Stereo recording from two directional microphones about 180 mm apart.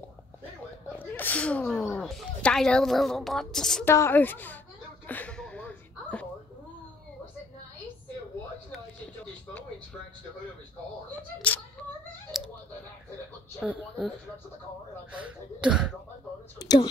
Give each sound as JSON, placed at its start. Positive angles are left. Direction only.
{"t": 0.9, "sound": "a sound", "side_deg": 10}
{"t": 3.9, "sound": "a woman's voice", "side_deg": 15}
{"t": 5.0, "sound": "a sound", "side_deg": 10}
{"t": 11.4, "sound": "a woman's voice", "side_deg": 10}
{"t": 12.3, "sound": "clicking", "side_deg": 0}
{"t": 13.6, "sound": "speech", "side_deg": 0}
{"t": 16.5, "sound": "speech", "side_deg": 25}